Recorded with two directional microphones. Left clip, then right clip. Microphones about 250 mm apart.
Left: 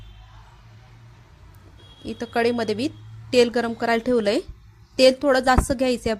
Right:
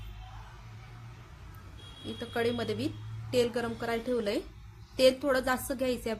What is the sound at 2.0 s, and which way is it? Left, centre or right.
A woman's voice, left.